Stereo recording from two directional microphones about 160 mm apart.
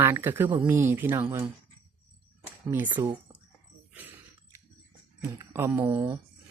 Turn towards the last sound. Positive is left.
turn(degrees=-15)  # may be behind; listen again after turning